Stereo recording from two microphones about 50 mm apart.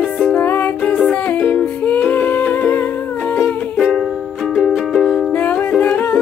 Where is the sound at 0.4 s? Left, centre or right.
Left.